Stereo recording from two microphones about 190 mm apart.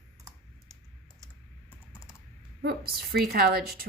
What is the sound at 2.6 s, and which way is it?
A woman's voice, 55° right (ahead or behind).